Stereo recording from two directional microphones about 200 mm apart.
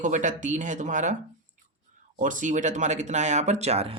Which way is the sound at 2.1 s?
40° right (ahead or behind).